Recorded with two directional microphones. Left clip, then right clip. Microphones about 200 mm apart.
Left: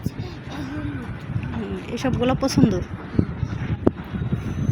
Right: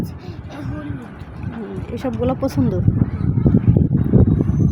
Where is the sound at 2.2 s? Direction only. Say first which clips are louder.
Even; 5° right (ahead or behind).